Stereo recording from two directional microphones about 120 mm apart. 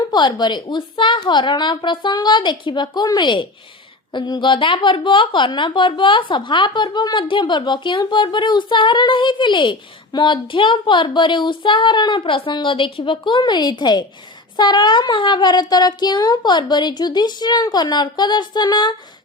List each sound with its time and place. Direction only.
0.1 s speech: 40° left (ahead or behind)